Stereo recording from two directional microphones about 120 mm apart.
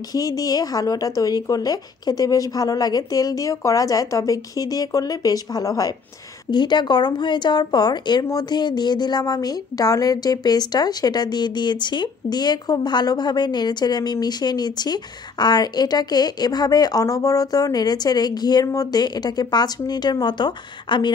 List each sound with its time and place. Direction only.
0.1 s speech: 30° left (ahead or behind)